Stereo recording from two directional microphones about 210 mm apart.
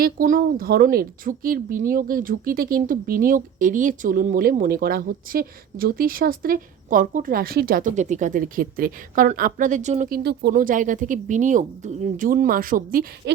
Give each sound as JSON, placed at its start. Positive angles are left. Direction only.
{"t": 0.0, "sound": "a woman's voice", "side_deg": -45}